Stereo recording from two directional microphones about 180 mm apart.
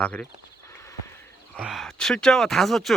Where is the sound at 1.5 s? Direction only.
Centre (ahead or behind).